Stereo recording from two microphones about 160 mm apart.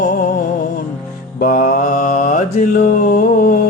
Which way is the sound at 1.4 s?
60° left (ahead or behind).